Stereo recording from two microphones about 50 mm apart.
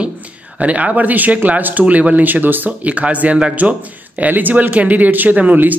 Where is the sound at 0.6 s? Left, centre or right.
Right.